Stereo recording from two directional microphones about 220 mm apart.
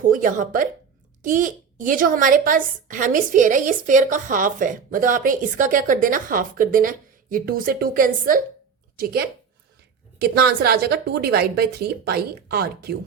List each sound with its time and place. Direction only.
0.0 s a woman's voice: 35° right (ahead or behind)